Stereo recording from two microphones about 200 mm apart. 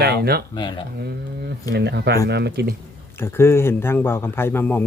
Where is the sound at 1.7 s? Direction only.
55° right (ahead or behind).